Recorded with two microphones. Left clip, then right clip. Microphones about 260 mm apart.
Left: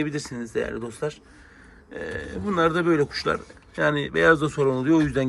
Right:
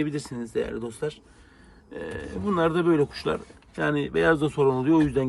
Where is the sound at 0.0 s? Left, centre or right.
Centre.